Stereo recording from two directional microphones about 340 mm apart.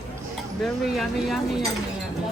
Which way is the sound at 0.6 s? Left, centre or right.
Centre.